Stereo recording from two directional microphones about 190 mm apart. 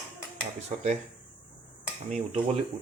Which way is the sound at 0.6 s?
35° right (ahead or behind).